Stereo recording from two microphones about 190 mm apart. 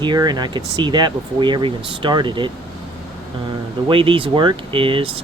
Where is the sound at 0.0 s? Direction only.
25° right (ahead or behind).